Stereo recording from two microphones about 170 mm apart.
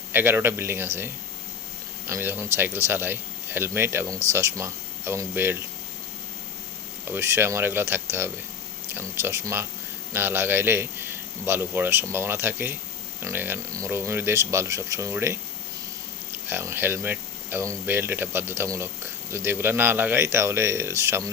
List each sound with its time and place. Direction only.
0.1 s a man's voice: 15° right (ahead or behind)
2.0 s a man's voice: 15° right (ahead or behind)
7.1 s a man's voice: 15° right (ahead or behind)
16.5 s a man's voice: 15° right (ahead or behind)